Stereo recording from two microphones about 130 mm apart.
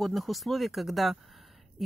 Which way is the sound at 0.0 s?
Centre (ahead or behind).